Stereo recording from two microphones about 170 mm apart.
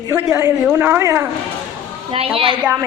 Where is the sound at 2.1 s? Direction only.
35° right (ahead or behind).